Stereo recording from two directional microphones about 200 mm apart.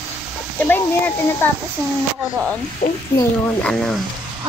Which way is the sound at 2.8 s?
35° left (ahead or behind).